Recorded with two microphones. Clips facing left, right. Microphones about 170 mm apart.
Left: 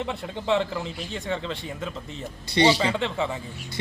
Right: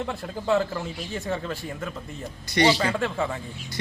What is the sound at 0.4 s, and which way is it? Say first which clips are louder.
A man's voice: right 1 dB; centre (ahead or behind).